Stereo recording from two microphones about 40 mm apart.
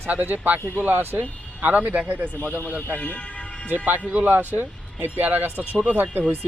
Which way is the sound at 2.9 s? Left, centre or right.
Left.